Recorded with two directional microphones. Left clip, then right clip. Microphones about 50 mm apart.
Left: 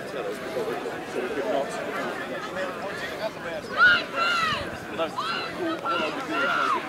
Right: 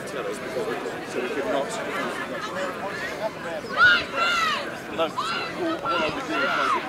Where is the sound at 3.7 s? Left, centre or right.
Centre.